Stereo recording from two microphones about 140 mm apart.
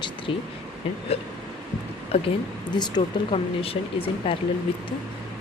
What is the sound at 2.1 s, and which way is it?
Speech, 40° left (ahead or behind).